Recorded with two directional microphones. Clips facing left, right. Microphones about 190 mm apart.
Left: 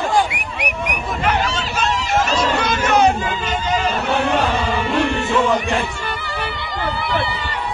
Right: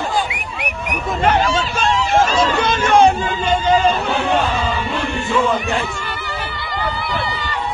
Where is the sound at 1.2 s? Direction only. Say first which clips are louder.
Right 5 dB; 30° right (ahead or behind).